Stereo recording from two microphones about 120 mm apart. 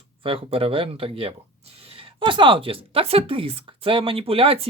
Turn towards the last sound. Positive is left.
turn(degrees=-50)  # may be behind; listen again after turning